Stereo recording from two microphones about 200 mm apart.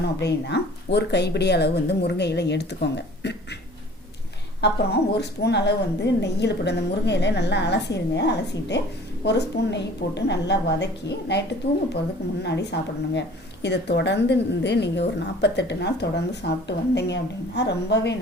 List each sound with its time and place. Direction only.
0.0 s speech: 60° left (ahead or behind)
5.1 s speech: 55° left (ahead or behind)